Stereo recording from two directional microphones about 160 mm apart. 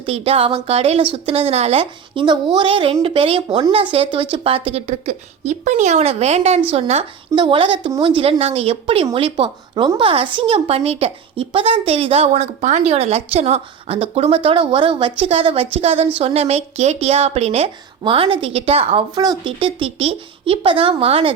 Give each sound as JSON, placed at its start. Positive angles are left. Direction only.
{"t": 0.0, "sound": "speech", "side_deg": -40}